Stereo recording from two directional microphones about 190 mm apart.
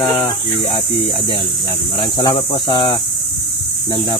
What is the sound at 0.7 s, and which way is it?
Speech, 30° left (ahead or behind).